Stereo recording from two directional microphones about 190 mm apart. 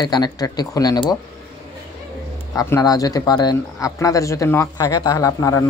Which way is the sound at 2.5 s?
15° left (ahead or behind).